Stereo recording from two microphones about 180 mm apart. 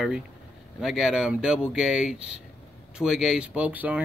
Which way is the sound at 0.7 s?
Centre (ahead or behind).